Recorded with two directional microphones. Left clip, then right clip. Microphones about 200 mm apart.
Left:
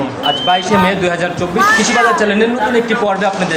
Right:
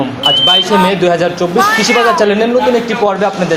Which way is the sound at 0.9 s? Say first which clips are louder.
Right 4 dB; 45° right (ahead or behind).